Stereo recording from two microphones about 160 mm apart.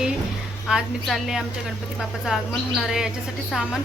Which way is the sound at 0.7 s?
Centre (ahead or behind).